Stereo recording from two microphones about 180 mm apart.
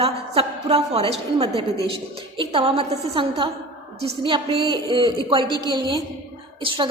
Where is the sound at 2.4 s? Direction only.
30° right (ahead or behind).